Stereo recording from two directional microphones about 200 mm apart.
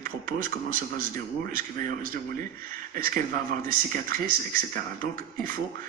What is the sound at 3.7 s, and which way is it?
A man's voice, 45° right (ahead or behind).